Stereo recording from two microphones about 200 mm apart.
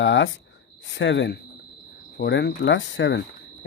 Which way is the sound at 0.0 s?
65° left (ahead or behind).